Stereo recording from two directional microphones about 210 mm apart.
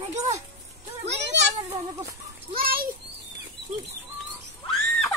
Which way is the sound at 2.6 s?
45° right (ahead or behind).